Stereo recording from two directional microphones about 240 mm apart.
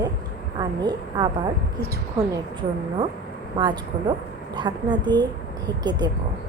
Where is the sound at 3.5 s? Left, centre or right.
Centre.